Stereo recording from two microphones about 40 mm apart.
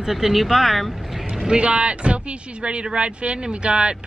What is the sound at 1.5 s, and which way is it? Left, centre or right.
Speech, right.